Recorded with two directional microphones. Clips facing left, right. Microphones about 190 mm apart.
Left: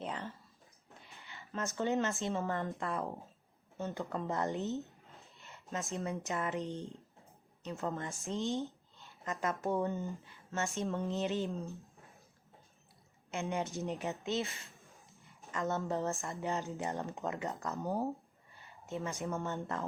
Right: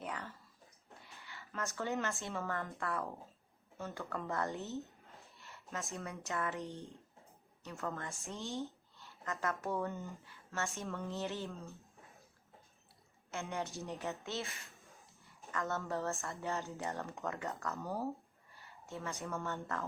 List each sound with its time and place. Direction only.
0.0 s a sound: 25° left (ahead or behind)
2.7 s speech: 20° left (ahead or behind)
5.4 s a sound: 20° left (ahead or behind)
6.1 s a woman's voice: 20° left (ahead or behind)
13.3 s speech: 20° left (ahead or behind)
15.5 s speech: 20° left (ahead or behind)